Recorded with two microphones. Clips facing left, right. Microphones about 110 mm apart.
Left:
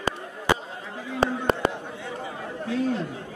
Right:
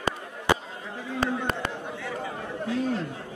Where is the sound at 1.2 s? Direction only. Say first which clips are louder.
Left 5 dB; 20° left (ahead or behind).